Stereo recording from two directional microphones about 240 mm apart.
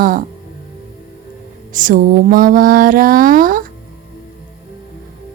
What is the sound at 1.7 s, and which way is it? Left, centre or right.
Speech, right.